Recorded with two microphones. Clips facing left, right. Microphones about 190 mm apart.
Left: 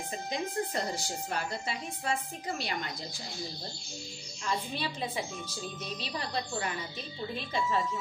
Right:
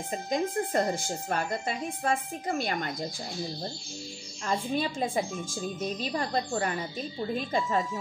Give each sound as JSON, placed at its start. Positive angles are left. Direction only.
{"t": 0.1, "sound": "speech", "side_deg": -50}
{"t": 4.5, "sound": "speech", "side_deg": -50}